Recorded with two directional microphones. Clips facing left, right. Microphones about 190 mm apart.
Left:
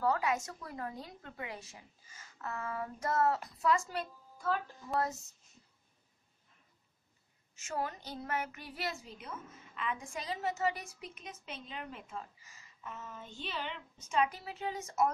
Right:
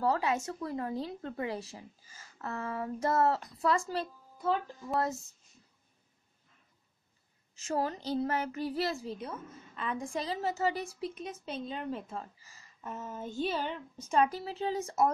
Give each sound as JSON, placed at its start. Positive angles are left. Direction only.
{"t": 0.0, "sound": "a woman's voice", "side_deg": -30}
{"t": 7.5, "sound": "a woman's voice", "side_deg": -35}